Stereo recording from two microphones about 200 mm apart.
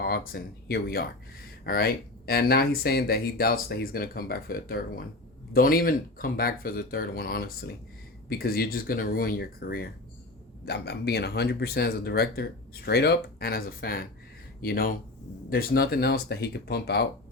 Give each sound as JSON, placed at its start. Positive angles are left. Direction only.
{"t": 0.0, "sound": "speech", "side_deg": 50}